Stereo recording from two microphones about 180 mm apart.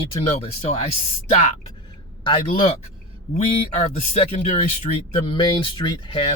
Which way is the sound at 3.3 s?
40° left (ahead or behind).